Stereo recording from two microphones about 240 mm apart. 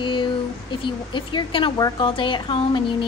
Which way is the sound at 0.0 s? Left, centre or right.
Centre.